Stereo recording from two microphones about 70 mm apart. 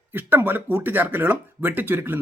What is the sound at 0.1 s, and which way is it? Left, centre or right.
Speech, right.